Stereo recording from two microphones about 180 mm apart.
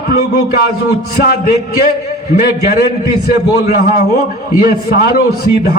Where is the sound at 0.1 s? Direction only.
65° left (ahead or behind).